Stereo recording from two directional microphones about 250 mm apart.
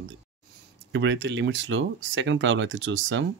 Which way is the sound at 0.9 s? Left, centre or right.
Right.